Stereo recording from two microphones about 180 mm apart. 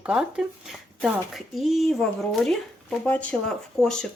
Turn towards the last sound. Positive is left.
turn(degrees=5)  # may be behind; listen again after turning